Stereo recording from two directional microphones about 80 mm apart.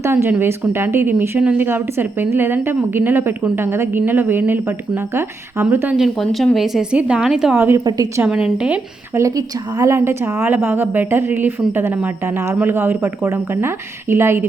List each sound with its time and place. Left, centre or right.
0.0 s speech: right
1.4 s a woman's voice: centre
1.6 s a woman's voice: right
5.7 s a woman's voice: right
6.0 s speech: centre
6.9 s a woman's voice: centre
7.5 s a woman's voice: right
7.9 s a woman's voice: right
8.3 s a woman's voice: centre
9.1 s a woman's voice: right